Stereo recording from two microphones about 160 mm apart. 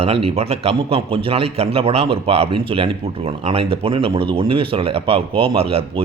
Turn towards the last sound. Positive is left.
turn(degrees=-35)  # may be behind; listen again after turning